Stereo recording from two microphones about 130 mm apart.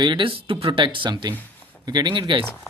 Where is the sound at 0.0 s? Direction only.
40° right (ahead or behind).